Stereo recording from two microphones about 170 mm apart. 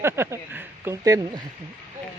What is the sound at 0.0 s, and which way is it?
Speech, 15° right (ahead or behind).